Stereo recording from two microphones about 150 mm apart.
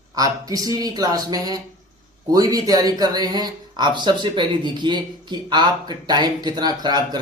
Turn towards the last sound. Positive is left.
turn(degrees=-30)  # may be behind; listen again after turning